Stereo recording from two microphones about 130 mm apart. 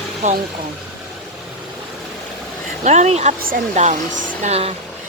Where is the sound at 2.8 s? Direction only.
60° right (ahead or behind).